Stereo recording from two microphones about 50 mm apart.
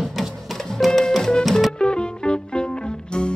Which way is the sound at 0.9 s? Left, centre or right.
Centre.